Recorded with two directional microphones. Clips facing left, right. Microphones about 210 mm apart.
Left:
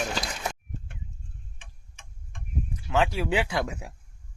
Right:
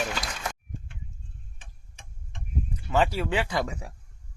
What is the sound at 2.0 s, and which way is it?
Tick-tock, 35° right (ahead or behind).